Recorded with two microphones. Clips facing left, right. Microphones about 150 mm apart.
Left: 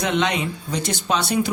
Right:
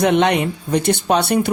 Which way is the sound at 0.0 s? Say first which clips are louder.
Right 7 dB; 60° right (ahead or behind).